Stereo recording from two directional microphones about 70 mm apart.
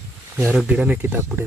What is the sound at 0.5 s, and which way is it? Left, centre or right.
Speech, centre.